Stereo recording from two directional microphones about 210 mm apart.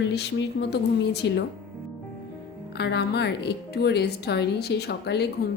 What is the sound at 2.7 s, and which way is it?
Speech, 50° left (ahead or behind).